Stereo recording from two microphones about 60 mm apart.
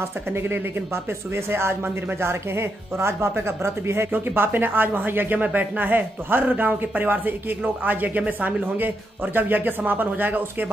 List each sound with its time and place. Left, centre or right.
0.3 s speech: right